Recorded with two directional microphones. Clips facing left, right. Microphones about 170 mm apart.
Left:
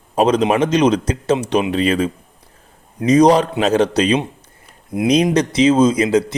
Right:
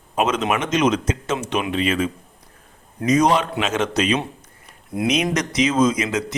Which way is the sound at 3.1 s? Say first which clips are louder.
Left 6 dB; 35° left (ahead or behind).